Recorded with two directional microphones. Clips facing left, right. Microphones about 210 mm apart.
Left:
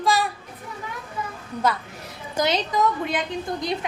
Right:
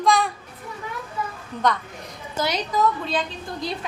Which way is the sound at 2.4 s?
15° left (ahead or behind).